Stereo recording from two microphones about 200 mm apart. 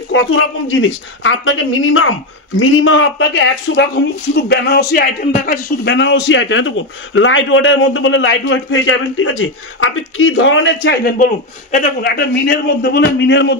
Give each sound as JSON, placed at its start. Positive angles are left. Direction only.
{"t": 0.1, "sound": "a woman's voice", "side_deg": 70}
{"t": 11.7, "sound": "a man's voice", "side_deg": 45}